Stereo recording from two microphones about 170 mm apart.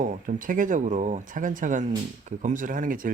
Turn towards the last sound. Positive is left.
turn(degrees=-55)  # may be behind; listen again after turning